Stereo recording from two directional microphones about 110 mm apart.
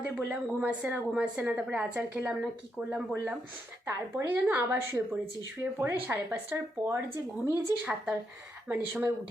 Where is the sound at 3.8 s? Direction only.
20° right (ahead or behind).